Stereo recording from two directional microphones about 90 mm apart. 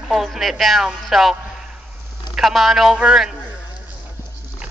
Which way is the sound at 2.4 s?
Centre (ahead or behind).